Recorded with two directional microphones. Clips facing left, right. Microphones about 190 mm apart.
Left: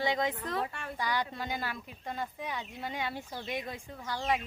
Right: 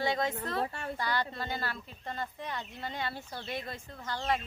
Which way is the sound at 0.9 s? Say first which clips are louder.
Left 2 dB; 10° left (ahead or behind).